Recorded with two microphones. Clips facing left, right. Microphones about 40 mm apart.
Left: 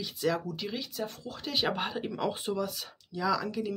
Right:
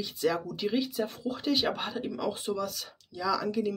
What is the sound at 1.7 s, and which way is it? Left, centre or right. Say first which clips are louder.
Speech: even; centre.